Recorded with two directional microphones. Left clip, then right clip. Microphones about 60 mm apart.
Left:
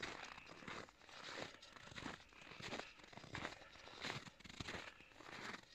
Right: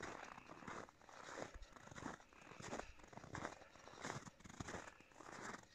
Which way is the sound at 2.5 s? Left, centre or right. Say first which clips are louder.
Left 1 dB; centre.